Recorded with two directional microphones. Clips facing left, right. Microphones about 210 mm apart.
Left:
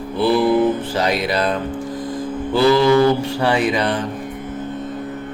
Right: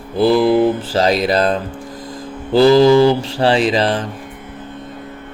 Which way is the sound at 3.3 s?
30° right (ahead or behind).